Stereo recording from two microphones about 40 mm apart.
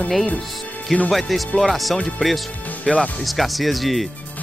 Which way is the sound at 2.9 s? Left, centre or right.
Left.